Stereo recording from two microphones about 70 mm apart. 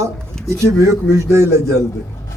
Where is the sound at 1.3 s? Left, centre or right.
Right.